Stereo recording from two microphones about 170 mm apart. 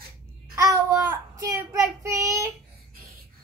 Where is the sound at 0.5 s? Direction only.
20° right (ahead or behind).